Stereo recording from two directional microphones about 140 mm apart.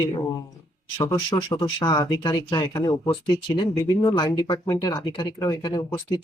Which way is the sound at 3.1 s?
35° left (ahead or behind).